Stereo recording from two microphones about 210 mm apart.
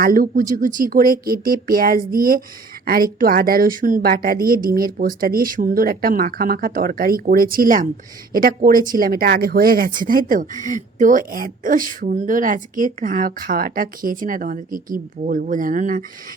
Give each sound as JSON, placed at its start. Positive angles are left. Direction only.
{"t": 0.0, "sound": "a woman's voice", "side_deg": -40}